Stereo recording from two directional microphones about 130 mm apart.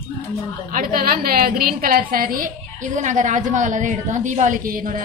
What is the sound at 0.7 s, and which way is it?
Speech, 90° right.